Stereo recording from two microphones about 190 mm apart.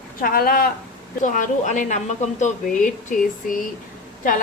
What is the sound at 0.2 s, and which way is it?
A woman's voice, 50° left (ahead or behind).